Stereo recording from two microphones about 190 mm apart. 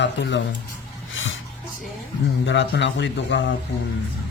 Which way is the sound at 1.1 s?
90° left.